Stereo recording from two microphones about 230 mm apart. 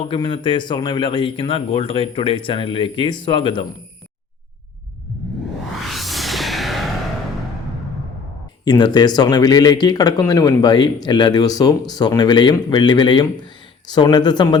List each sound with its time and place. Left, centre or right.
0.1 s a man's voice: left
5.8 s music: centre
8.6 s speech: centre